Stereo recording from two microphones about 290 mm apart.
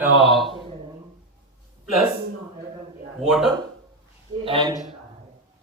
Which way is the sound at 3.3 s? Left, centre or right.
Centre.